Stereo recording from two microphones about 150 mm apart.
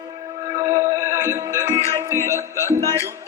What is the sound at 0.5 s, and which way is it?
Music, 20° right (ahead or behind).